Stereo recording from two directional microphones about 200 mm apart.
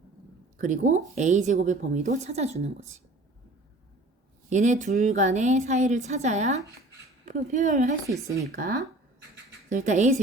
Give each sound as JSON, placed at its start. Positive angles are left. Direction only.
{"t": 0.6, "sound": "a woman's voice", "side_deg": -40}
{"t": 4.4, "sound": "a woman's voice", "side_deg": -35}
{"t": 8.0, "sound": "speech", "side_deg": -15}
{"t": 9.6, "sound": "a woman's voice", "side_deg": -40}